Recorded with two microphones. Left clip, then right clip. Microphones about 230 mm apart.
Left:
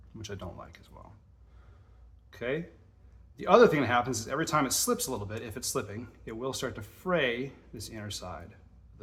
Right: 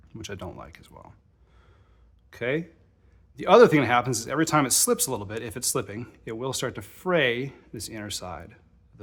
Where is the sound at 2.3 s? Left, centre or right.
Right.